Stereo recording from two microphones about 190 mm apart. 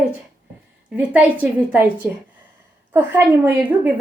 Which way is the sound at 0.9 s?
10° right (ahead or behind).